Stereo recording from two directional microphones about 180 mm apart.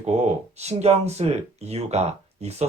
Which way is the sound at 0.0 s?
35° right (ahead or behind).